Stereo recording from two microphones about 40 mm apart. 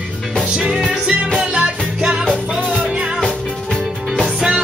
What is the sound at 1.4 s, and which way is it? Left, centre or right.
Music, right.